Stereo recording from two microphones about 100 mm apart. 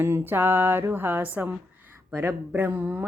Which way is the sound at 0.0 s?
20° right (ahead or behind).